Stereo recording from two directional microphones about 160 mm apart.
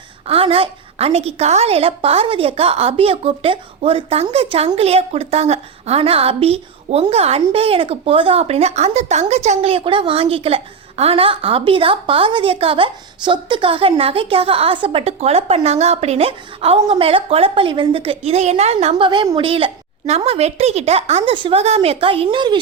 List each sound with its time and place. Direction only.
0.3 s speech: 35° right (ahead or behind)